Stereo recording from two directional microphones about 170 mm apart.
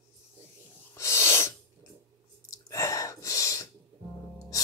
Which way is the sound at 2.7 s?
20° left (ahead or behind).